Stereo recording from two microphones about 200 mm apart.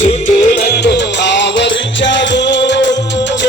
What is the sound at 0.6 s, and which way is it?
Music, 55° left (ahead or behind).